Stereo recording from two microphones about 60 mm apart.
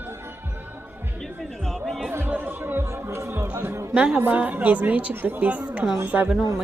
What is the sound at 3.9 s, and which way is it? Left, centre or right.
A woman's voice, right.